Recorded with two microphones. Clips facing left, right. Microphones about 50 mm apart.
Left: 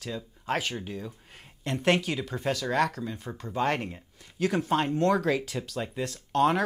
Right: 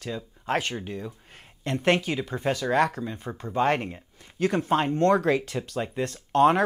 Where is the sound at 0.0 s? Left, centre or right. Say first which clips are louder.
Right 2 dB; centre.